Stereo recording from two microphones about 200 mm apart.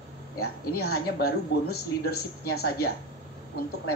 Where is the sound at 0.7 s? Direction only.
50° left (ahead or behind).